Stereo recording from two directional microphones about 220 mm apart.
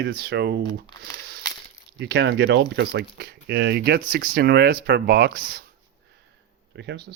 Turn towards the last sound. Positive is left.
turn(degrees=-50)  # may be behind; listen again after turning